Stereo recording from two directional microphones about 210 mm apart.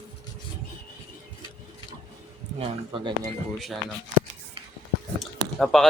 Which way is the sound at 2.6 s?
25° right (ahead or behind).